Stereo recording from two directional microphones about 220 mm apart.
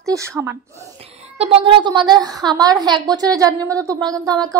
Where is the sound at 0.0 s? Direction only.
15° right (ahead or behind).